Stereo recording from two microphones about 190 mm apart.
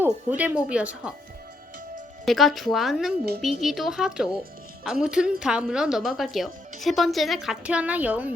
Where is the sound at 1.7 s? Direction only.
45° right (ahead or behind).